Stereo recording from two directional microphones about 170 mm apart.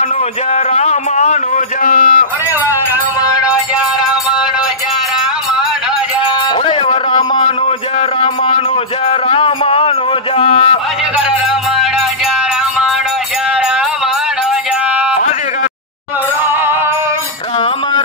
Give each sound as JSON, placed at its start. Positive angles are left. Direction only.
{"t": 0.7, "sound": "a man's voice", "side_deg": 40}
{"t": 3.2, "sound": "music", "side_deg": 20}
{"t": 6.6, "sound": "music", "side_deg": 35}
{"t": 9.3, "sound": "a sound", "side_deg": 35}